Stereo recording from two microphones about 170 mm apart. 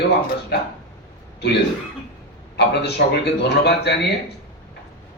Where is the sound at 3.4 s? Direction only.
75° left (ahead or behind).